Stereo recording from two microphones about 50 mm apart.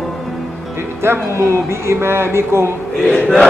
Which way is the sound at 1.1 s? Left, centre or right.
Right.